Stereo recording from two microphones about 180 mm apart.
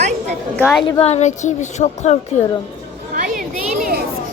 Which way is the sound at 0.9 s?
35° left (ahead or behind).